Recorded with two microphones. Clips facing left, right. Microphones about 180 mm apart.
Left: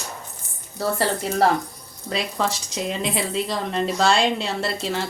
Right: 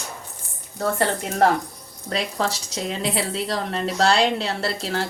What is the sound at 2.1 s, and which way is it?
Speech, centre (ahead or behind).